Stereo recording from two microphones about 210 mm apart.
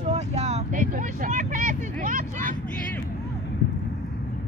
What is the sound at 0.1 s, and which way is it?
Vehicle, 30° right (ahead or behind).